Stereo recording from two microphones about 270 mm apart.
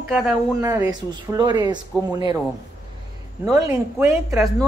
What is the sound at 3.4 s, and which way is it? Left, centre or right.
A woman's voice, centre.